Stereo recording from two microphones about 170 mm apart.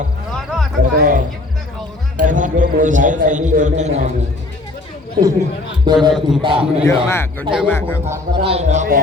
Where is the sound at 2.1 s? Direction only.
50° right (ahead or behind).